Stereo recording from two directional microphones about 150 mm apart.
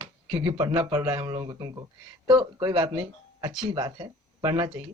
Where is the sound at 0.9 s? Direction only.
25° right (ahead or behind).